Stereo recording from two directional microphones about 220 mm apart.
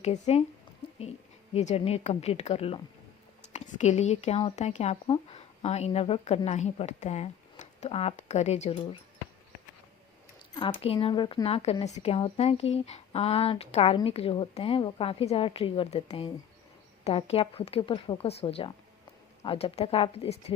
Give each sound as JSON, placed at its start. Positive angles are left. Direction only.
{"t": 0.0, "sound": "speech", "side_deg": 30}
{"t": 1.5, "sound": "speech", "side_deg": 25}
{"t": 10.5, "sound": "speech", "side_deg": 20}